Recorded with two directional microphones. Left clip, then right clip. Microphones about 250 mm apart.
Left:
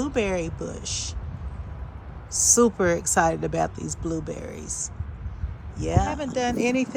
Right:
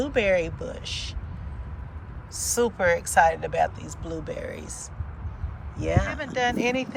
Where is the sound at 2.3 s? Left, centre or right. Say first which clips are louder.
Left 5 dB; left.